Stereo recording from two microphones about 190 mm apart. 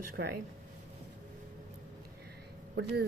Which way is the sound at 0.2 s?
60° right (ahead or behind).